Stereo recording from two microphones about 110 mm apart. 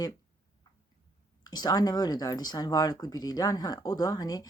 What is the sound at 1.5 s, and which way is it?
Speech, 35° left (ahead or behind).